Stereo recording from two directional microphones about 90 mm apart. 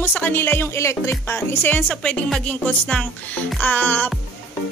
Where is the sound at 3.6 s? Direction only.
20° left (ahead or behind).